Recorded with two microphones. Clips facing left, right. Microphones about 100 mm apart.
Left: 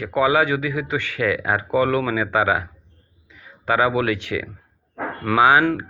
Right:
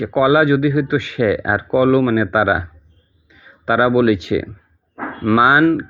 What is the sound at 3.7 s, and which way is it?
Speech, 15° right (ahead or behind).